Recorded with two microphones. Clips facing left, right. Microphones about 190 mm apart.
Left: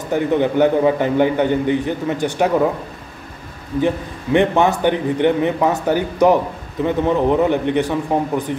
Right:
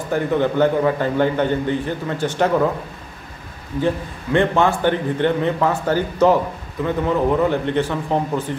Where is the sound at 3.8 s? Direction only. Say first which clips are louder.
Left 1 dB; 15° left (ahead or behind).